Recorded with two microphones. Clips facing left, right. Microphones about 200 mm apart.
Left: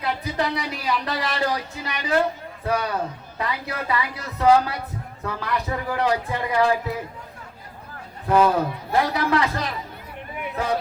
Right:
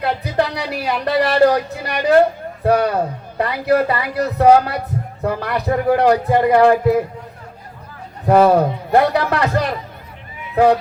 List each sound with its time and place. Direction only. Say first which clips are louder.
0.0 s speech: right 6 dB; 65° right (ahead or behind)
8.3 s speech: right 7 dB; 60° right (ahead or behind)